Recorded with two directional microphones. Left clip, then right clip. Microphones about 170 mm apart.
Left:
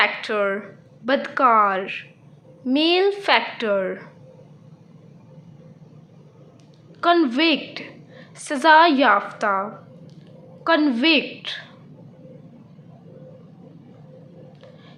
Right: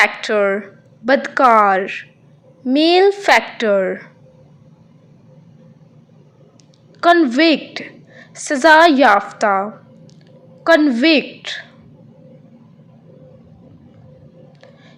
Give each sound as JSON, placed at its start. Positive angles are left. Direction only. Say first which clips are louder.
{"t": 0.0, "sound": "a woman's voice", "louder": "right 6 dB", "side_deg": -30}
{"t": 7.2, "sound": "a woman's voice", "louder": "right 5 dB", "side_deg": -25}
{"t": 10.8, "sound": "a woman's voice", "louder": "right 5 dB", "side_deg": -25}